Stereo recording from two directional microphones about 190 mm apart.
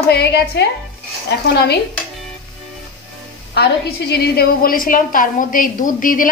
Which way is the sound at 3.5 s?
60° left (ahead or behind).